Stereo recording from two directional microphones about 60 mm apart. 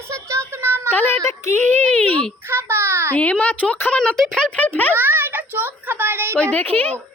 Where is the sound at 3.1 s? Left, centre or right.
Left.